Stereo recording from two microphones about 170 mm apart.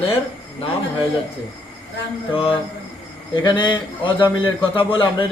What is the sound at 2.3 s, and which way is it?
A man's voice, 30° left (ahead or behind).